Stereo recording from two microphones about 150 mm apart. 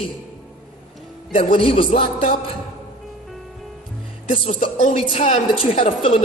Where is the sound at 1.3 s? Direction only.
35° left (ahead or behind).